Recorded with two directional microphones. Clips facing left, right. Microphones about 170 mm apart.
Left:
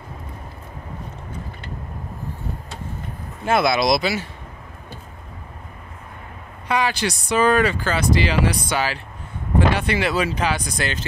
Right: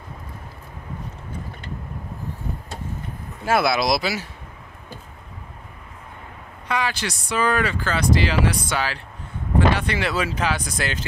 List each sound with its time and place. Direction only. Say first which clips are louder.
3.4 s speech: left 2 dB; 5° right (ahead or behind)
6.7 s speech: left 4 dB; 15° left (ahead or behind)
7.9 s speech: left 1 dB; 5° left (ahead or behind)